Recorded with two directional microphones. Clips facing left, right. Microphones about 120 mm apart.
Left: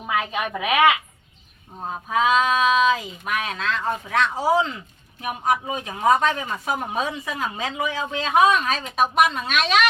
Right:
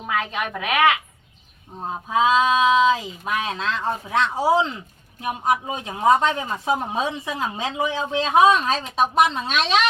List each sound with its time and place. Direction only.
0.2 s a woman's voice: 5° left (ahead or behind)
1.9 s speech: 20° right (ahead or behind)